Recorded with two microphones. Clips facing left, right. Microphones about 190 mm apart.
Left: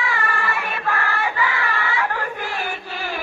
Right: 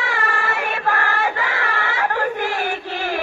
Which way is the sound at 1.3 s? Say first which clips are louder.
Even; 75° right (ahead or behind).